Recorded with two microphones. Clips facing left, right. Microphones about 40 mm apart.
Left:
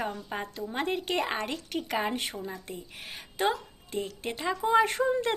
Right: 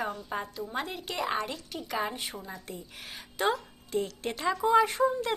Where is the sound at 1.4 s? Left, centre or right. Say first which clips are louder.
Left 3 dB; left.